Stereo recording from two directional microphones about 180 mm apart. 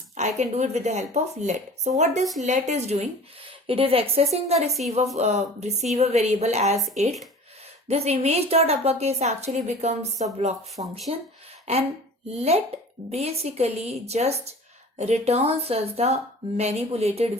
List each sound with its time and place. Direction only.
0.2 s a woman's voice: 40° right (ahead or behind)